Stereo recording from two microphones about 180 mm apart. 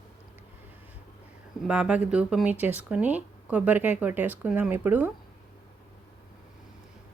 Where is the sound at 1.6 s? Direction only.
5° right (ahead or behind).